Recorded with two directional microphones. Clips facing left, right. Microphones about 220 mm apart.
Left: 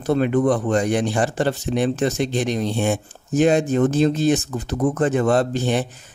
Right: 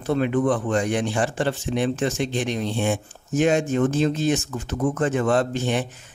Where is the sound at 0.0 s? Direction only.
40° left (ahead or behind).